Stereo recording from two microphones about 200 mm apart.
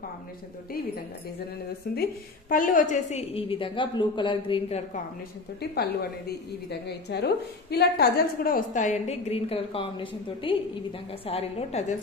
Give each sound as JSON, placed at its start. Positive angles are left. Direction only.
{"t": 1.9, "sound": "a woman's voice", "side_deg": 50}
{"t": 5.6, "sound": "a woman's voice", "side_deg": 55}